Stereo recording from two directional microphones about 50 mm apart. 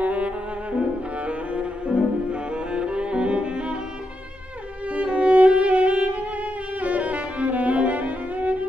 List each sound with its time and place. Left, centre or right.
0.0 s music: right
4.8 s music: right